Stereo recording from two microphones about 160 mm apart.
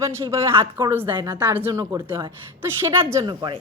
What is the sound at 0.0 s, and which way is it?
A woman's voice, 15° right (ahead or behind).